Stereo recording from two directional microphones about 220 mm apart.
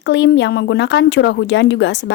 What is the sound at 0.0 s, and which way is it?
Speech, 50° left (ahead or behind).